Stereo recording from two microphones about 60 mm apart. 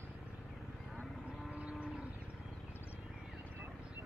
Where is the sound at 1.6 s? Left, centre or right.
Right.